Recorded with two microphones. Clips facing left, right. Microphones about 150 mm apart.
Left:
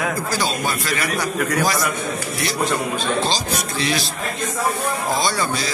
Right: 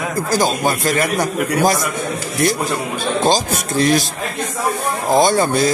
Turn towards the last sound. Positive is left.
turn(degrees=-50)  # may be behind; listen again after turning